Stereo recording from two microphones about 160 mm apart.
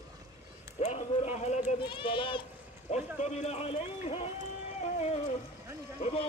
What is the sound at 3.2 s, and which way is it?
Speech, 45° left (ahead or behind).